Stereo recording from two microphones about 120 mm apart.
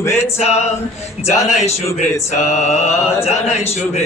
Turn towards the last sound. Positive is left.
turn(degrees=65)  # may be behind; listen again after turning